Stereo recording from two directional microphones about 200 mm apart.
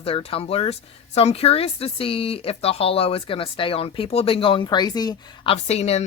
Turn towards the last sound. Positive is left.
turn(degrees=30)  # may be behind; listen again after turning